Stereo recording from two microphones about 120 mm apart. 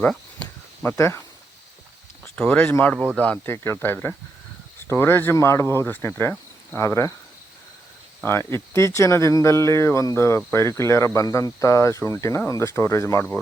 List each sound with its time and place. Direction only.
0.0 s a sound: 10° left (ahead or behind)
0.9 s speech: 25° left (ahead or behind)
2.2 s speech: 5° left (ahead or behind); by 7.1 s 25° left (ahead or behind)
8.2 s speech: 20° left (ahead or behind)